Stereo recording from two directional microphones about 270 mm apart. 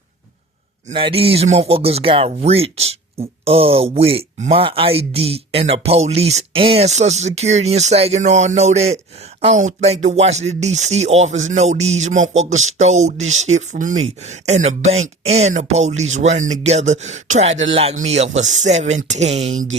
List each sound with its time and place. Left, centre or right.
0.9 s speech: centre